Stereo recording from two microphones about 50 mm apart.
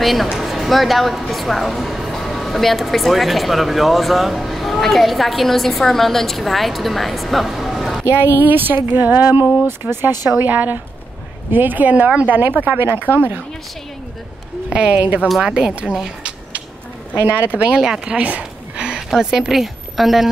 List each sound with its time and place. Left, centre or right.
0.0 s speech: centre
8.4 s speech: right
10.3 s speech: right
12.4 s speech: right
14.7 s speech: right
17.1 s speech: right
17.7 s speech: centre
18.1 s speech: right; by 20.2 s centre